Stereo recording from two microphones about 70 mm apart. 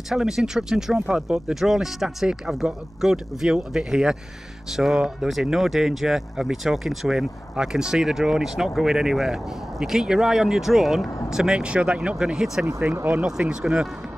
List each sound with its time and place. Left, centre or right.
0.1 s speech: centre
12.8 s speech: right